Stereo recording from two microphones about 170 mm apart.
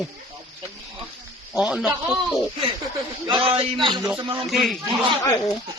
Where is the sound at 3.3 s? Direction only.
30° right (ahead or behind).